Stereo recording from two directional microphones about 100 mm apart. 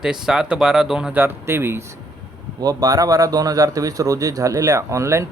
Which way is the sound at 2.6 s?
40° right (ahead or behind).